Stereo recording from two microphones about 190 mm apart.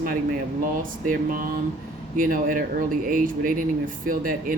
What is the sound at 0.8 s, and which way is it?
Speech, 45° right (ahead or behind).